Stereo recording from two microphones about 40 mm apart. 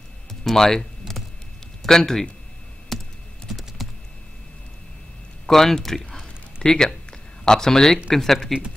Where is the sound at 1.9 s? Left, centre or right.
Centre.